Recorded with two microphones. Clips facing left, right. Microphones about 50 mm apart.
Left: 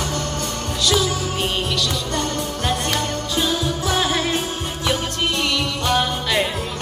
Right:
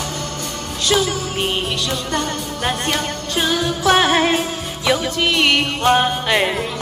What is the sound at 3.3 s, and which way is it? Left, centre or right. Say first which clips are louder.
Music: right 4 dB; right.